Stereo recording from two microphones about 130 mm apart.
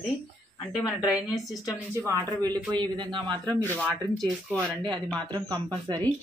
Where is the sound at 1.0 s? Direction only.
30° left (ahead or behind).